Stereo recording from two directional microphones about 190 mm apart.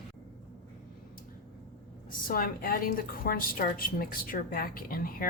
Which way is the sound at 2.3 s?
50° left (ahead or behind).